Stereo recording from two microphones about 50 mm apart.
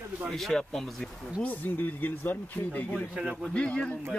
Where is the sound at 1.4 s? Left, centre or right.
Left.